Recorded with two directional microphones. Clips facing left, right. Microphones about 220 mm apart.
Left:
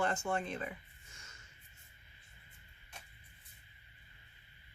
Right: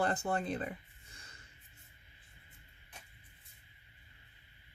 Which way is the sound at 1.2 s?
35° right (ahead or behind).